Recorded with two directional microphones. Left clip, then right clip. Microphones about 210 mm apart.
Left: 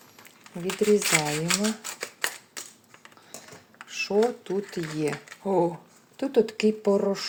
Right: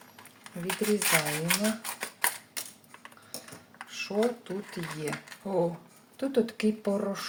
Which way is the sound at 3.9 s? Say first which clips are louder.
Left 5 dB; 30° left (ahead or behind).